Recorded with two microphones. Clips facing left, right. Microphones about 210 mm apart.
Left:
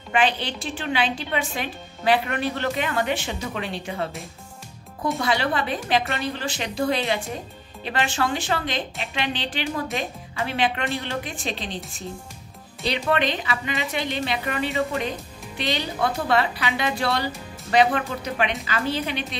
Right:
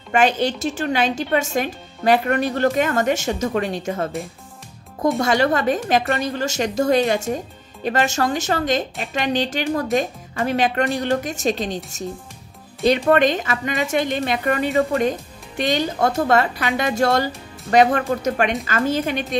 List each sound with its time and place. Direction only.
0.1 s a woman's voice: 45° right (ahead or behind)
5.2 s a woman's voice: 45° right (ahead or behind)